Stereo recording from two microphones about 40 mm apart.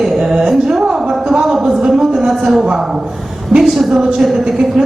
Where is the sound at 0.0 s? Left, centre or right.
Centre.